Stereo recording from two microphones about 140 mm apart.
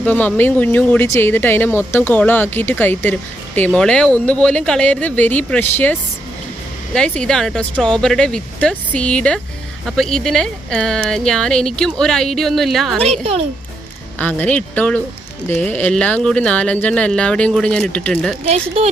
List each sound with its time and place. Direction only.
0.0 s speech: 10° left (ahead or behind)
13.0 s a woman's voice: 50° right (ahead or behind)
14.2 s speech: 10° left (ahead or behind)
18.4 s a woman's voice: 50° right (ahead or behind)